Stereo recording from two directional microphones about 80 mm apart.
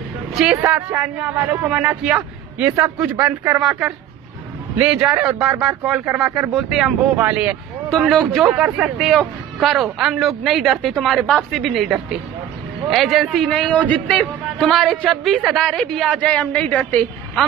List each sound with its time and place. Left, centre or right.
0.7 s speech: right
1.5 s speech: right
1.8 s a man's voice: centre
4.7 s a man's voice: centre
7.2 s speech: centre
8.1 s a woman's voice: centre
8.6 s a woman's voice: centre
13.7 s a woman's voice: centre
14.6 s a woman's voice: centre